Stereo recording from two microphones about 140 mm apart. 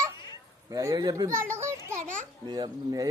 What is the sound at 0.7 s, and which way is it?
A man's voice, 25° right (ahead or behind).